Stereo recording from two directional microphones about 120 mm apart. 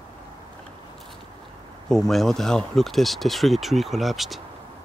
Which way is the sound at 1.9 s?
Centre (ahead or behind).